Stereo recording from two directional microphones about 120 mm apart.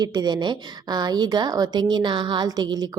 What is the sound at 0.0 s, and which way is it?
A woman's voice, 35° right (ahead or behind).